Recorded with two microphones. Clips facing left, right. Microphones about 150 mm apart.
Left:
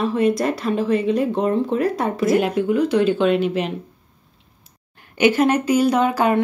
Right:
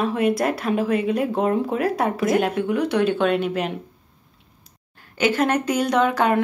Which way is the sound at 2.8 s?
70° right (ahead or behind).